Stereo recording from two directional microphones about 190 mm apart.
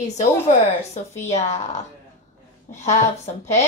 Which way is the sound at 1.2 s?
35° left (ahead or behind).